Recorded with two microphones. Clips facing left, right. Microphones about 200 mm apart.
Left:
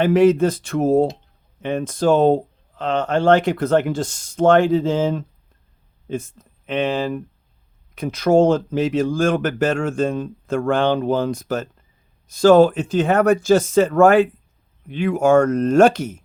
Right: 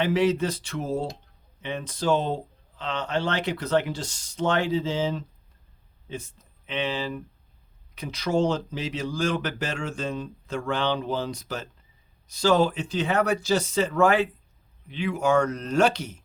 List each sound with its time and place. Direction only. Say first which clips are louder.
0.0 s speech: left 8 dB; 50° left (ahead or behind)